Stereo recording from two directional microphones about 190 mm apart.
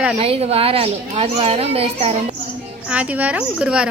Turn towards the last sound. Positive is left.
turn(degrees=-5)  # may be behind; listen again after turning